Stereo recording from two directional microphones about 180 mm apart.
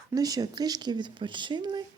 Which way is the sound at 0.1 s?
20° right (ahead or behind).